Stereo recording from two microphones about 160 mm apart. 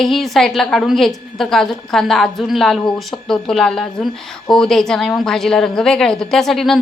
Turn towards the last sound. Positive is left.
turn(degrees=0)  # may be behind; listen again after turning